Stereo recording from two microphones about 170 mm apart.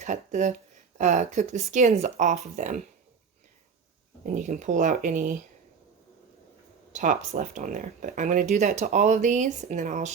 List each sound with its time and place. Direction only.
0.0 s speech: 45° right (ahead or behind)
4.3 s speech: 45° right (ahead or behind)
6.9 s speech: 50° right (ahead or behind)